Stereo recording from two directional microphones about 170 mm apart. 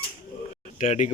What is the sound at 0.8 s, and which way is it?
Speech, 45° left (ahead or behind).